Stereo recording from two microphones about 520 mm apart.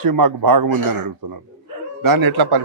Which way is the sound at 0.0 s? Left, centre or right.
Right.